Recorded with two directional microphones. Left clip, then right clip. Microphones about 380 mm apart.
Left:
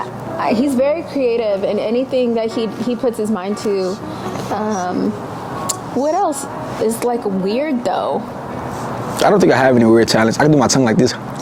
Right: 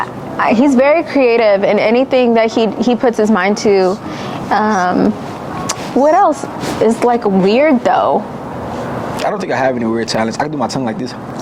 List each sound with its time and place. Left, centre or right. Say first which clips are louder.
0.3 s a woman's voice: right 5 dB; centre
9.1 s speech: left 5 dB; left